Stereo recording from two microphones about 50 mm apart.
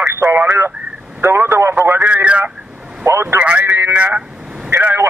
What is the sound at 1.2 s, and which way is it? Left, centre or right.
Vehicle, right.